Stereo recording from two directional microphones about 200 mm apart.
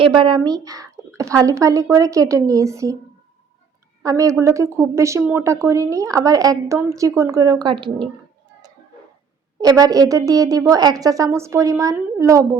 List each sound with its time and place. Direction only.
0.0 s a woman's voice: 25° right (ahead or behind)
4.0 s a woman's voice: 15° right (ahead or behind)
9.6 s a woman's voice: 15° right (ahead or behind)